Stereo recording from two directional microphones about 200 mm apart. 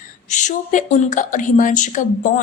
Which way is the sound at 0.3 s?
35° left (ahead or behind).